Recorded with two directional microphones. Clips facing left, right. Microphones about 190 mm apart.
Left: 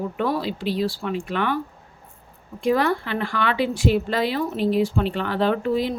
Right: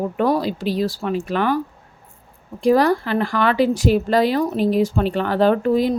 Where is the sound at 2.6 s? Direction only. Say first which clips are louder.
Right 5 dB; 40° right (ahead or behind).